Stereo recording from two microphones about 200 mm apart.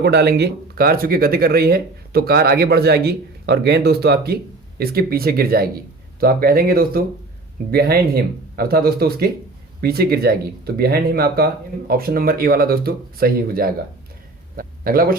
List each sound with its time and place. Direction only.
0.0 s speech: 55° right (ahead or behind)